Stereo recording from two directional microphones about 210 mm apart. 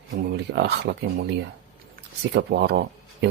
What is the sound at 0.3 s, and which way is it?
Speech, 55° right (ahead or behind).